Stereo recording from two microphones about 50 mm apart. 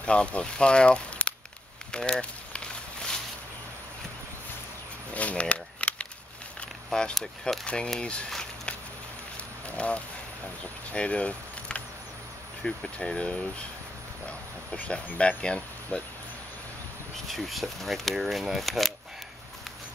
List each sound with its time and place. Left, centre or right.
0.0 s speech: left
1.9 s a sound: centre
5.1 s a sound: left
6.9 s speech: centre
9.8 s speech: left
10.9 s vehicle: left
12.6 s speech: centre
15.1 s speech: left
17.3 s speech: centre